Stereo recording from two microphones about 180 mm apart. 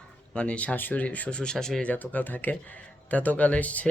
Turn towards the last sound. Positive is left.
turn(degrees=10)  # may be behind; listen again after turning